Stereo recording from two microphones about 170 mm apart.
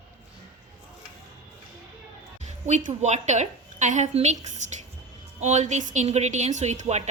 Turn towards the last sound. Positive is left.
turn(degrees=-40)  # may be behind; listen again after turning